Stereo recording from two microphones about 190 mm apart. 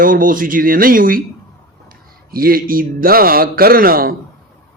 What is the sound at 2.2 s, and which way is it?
A man's voice, 50° right (ahead or behind).